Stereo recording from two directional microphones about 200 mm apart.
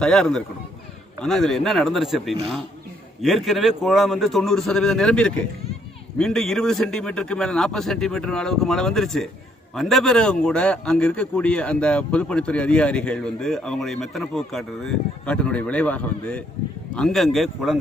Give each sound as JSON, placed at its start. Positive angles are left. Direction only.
{"t": 0.0, "sound": "speech", "side_deg": 5}